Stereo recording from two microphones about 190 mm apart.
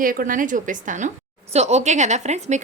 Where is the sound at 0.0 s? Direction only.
45° right (ahead or behind).